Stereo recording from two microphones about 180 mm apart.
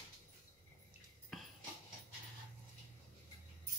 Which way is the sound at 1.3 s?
5° left (ahead or behind).